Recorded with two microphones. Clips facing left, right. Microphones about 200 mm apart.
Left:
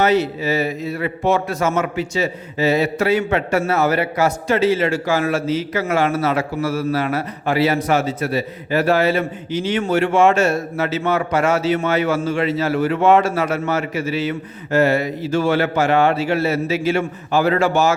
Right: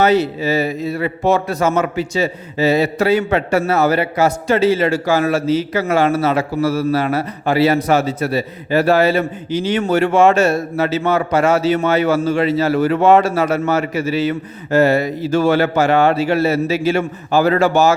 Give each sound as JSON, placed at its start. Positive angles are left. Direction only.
{"t": 0.0, "sound": "a man's voice", "side_deg": -35}